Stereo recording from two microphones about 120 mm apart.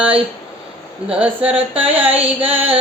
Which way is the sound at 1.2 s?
10° right (ahead or behind).